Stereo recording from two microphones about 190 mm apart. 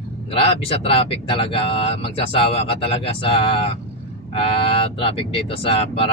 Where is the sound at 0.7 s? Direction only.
30° left (ahead or behind).